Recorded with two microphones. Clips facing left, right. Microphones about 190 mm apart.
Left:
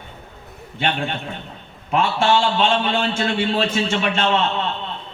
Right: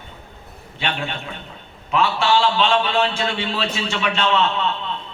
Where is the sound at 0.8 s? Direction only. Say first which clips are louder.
Left 3 dB; 45° left (ahead or behind).